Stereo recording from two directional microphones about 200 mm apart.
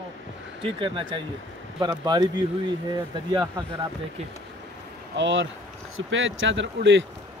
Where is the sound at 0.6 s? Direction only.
25° right (ahead or behind).